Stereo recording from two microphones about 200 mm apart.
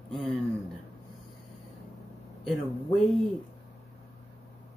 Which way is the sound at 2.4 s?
Centre (ahead or behind).